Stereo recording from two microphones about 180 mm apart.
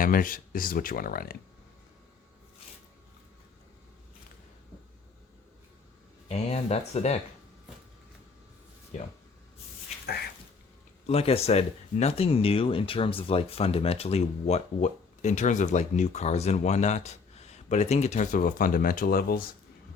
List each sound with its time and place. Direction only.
0.0 s speech: 50° left (ahead or behind)
6.2 s speech: 35° left (ahead or behind)
8.9 s speech: 40° left (ahead or behind)
11.0 s speech: 35° left (ahead or behind); by 19.5 s 55° left (ahead or behind)